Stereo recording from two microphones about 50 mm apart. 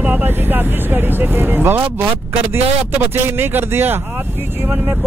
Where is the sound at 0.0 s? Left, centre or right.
Right.